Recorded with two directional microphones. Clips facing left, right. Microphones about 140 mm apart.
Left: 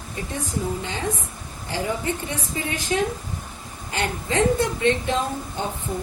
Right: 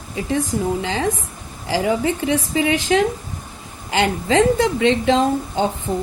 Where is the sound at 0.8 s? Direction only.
90° right.